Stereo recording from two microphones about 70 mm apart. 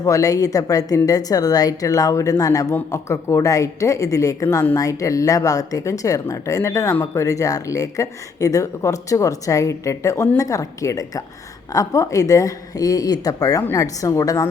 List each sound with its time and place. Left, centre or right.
0.0 s a woman's voice: left
6.9 s speech: left
7.2 s a woman's voice: left